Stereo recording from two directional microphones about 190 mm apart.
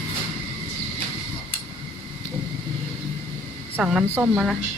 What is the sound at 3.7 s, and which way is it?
Speech, 5° right (ahead or behind).